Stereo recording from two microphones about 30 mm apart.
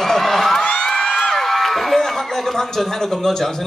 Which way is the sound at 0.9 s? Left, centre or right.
Centre.